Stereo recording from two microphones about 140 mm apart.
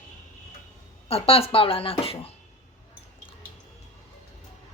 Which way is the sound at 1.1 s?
45° left (ahead or behind).